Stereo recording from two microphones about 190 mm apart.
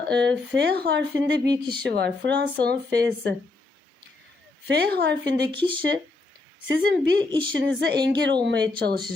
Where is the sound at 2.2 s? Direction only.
65° right (ahead or behind).